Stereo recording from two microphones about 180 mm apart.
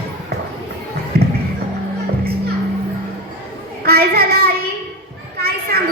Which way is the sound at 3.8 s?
60° right (ahead or behind).